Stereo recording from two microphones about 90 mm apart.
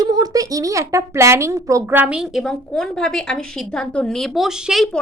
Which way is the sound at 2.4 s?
5° left (ahead or behind).